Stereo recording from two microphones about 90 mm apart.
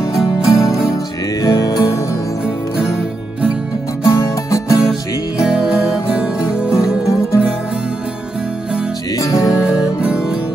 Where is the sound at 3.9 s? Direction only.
40° left (ahead or behind).